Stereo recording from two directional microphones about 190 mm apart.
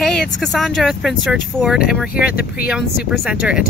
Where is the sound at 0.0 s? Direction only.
Centre (ahead or behind).